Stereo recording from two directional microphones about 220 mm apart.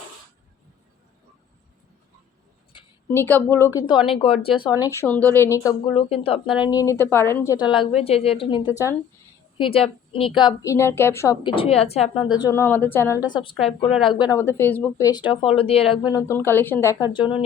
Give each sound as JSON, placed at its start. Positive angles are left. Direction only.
{"t": 2.7, "sound": "a sound", "side_deg": 20}
{"t": 3.1, "sound": "a woman's voice", "side_deg": 10}
{"t": 4.9, "sound": "a woman's voice", "side_deg": 10}
{"t": 6.0, "sound": "a woman's voice", "side_deg": 25}
{"t": 9.6, "sound": "a woman's voice", "side_deg": 25}
{"t": 15.3, "sound": "a woman's voice", "side_deg": 25}